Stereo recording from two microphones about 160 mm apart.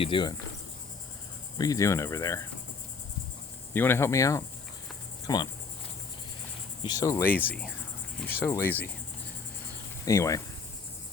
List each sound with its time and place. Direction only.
0.0 s cricket: 30° left (ahead or behind)
1.5 s cricket: 20° left (ahead or behind)
3.7 s speech: 15° left (ahead or behind)
5.2 s cricket: 25° left (ahead or behind)
6.8 s speech: 25° left (ahead or behind)
10.1 s cricket: 20° left (ahead or behind)